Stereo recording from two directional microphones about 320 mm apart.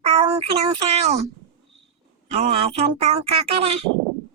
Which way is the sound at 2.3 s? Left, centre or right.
Centre.